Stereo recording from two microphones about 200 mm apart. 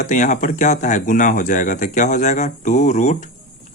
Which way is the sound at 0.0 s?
40° left (ahead or behind).